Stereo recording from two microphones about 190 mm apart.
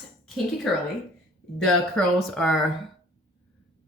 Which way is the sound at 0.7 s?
Centre (ahead or behind).